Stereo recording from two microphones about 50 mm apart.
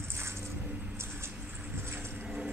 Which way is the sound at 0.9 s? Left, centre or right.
Right.